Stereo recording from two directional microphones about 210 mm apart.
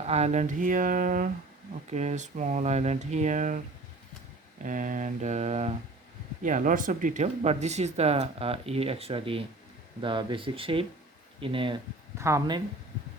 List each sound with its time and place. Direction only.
0.0 s speech: 30° right (ahead or behind)
4.6 s speech: 40° right (ahead or behind); by 11.8 s 25° right (ahead or behind)
12.1 s speech: 15° right (ahead or behind)